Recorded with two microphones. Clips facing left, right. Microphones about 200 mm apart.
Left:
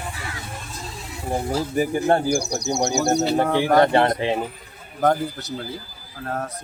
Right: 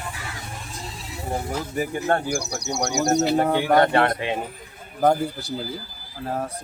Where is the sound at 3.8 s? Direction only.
25° left (ahead or behind).